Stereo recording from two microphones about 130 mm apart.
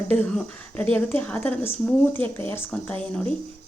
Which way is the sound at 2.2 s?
45° right (ahead or behind).